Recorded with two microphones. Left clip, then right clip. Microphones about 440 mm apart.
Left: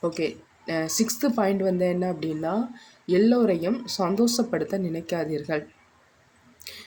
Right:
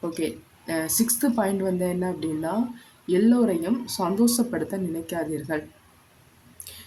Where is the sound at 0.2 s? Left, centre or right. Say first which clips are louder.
Left 1 dB; right.